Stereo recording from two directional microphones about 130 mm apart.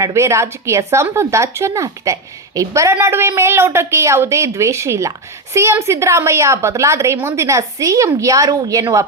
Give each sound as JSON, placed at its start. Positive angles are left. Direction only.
{"t": 0.0, "sound": "a woman's voice", "side_deg": -20}